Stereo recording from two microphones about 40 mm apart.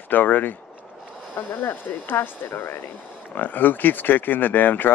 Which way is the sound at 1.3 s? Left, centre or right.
Left.